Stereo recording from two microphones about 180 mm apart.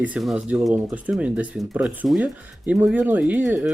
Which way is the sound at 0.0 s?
5° right (ahead or behind).